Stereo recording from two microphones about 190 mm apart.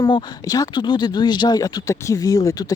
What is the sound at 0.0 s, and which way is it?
Speech, 20° left (ahead or behind).